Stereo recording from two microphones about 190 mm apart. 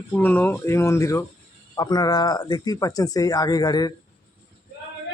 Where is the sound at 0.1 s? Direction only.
10° left (ahead or behind).